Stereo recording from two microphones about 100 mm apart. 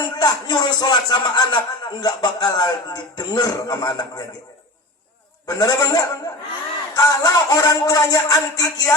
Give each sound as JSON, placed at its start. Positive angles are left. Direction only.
{"t": 0.0, "sound": "speech", "side_deg": 40}
{"t": 5.5, "sound": "speech", "side_deg": 35}